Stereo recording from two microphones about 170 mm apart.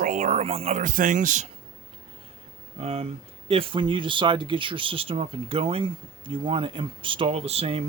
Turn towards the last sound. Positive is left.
turn(degrees=-35)  # may be behind; listen again after turning